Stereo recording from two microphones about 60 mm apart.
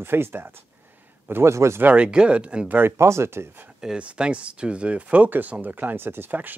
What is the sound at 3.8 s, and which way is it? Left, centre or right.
Speech, centre.